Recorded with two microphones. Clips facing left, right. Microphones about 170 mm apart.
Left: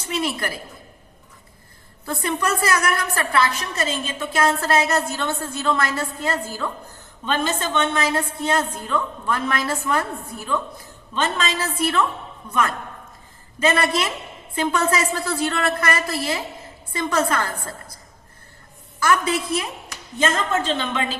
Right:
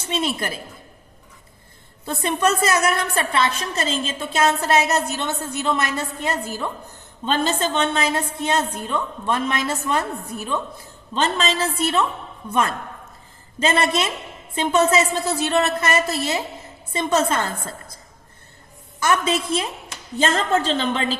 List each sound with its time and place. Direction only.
0.0 s a woman's voice: 25° right (ahead or behind)
2.0 s a woman's voice: 20° right (ahead or behind)
7.3 s a woman's voice: 30° right (ahead or behind)
18.9 s a woman's voice: 20° right (ahead or behind)